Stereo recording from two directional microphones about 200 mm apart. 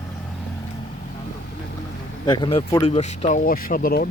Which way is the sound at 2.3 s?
25° left (ahead or behind).